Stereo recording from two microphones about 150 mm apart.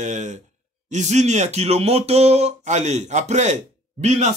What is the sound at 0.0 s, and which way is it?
Speech, 50° right (ahead or behind).